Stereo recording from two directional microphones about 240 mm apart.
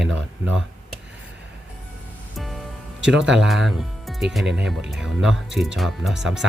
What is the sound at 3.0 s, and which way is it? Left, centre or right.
Speech, centre.